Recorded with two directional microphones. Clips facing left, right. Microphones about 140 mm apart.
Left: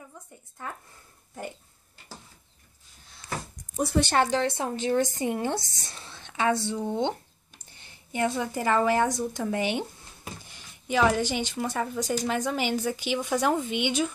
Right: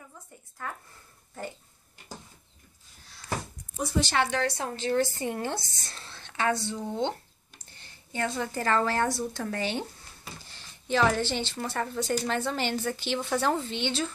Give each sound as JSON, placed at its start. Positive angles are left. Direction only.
{"t": 3.7, "sound": "speech", "side_deg": 55}
{"t": 4.4, "sound": "a woman's voice", "side_deg": 25}